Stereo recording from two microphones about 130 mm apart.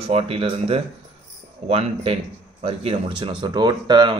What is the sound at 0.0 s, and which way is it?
A man's voice, 50° right (ahead or behind).